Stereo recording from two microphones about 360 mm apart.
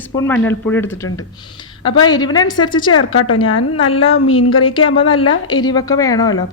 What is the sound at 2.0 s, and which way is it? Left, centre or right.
Speech, centre.